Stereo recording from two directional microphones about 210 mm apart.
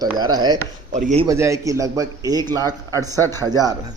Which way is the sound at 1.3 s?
15° right (ahead or behind).